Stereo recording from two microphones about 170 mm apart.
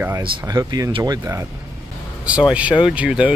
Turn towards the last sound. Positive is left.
turn(degrees=-5)  # may be behind; listen again after turning